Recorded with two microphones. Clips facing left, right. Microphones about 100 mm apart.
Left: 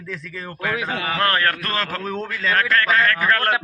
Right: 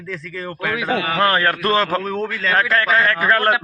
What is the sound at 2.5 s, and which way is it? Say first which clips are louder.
Speech: right 2 dB; 15° right (ahead or behind).